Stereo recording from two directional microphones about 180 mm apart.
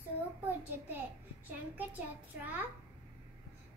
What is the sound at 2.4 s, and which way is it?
Speech, 10° right (ahead or behind).